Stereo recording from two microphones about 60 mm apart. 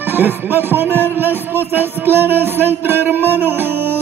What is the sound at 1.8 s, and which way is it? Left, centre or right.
Music, right.